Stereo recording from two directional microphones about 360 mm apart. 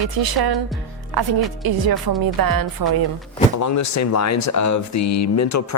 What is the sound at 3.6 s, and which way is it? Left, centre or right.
Speech, left.